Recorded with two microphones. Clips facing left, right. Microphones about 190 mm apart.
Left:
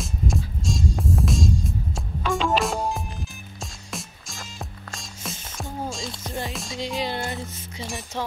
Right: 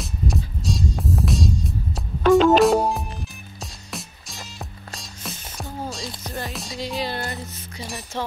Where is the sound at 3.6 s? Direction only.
Centre (ahead or behind).